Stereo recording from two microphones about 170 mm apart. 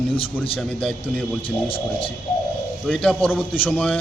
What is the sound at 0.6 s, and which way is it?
Speech, 5° left (ahead or behind).